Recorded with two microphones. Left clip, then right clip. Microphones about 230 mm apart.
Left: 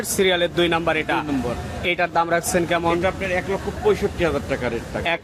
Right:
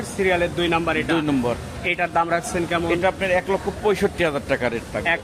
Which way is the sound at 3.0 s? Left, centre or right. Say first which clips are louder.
Right 2 dB; right.